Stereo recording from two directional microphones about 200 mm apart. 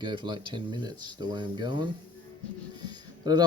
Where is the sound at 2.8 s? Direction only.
20° right (ahead or behind).